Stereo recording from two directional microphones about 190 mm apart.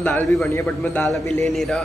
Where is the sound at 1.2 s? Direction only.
35° right (ahead or behind).